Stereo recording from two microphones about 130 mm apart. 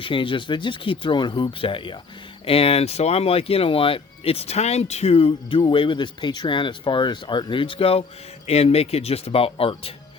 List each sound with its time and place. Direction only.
0.0 s speech: 40° left (ahead or behind)